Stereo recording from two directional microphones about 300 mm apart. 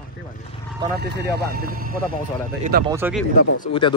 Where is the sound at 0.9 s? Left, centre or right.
Right.